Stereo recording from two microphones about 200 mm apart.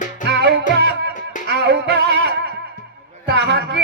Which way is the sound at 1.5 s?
60° right (ahead or behind).